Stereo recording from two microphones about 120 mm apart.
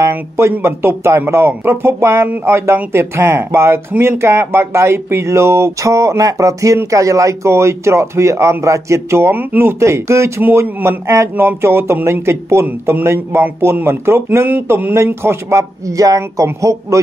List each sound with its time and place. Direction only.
0.0 s speech: 25° right (ahead or behind)